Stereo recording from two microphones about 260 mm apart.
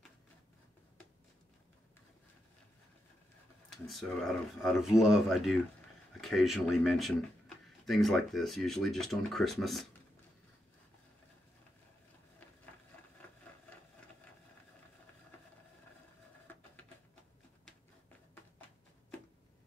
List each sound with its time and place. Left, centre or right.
3.7 s speech: centre
16.5 s printer: centre